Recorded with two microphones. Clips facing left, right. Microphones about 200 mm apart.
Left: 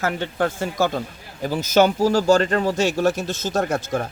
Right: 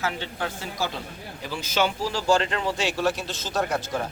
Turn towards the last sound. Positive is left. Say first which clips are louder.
# left 4 dB
turn(degrees=50)  # may be behind; listen again after turning